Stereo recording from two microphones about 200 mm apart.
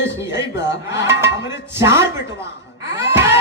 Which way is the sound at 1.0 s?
15° right (ahead or behind).